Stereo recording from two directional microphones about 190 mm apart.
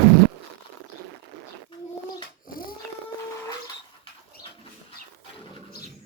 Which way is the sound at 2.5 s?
50° left (ahead or behind).